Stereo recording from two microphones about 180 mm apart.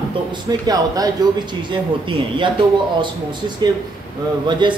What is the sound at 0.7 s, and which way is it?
Speech, 20° right (ahead or behind).